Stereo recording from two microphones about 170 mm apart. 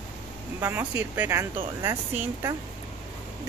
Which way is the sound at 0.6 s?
10° right (ahead or behind).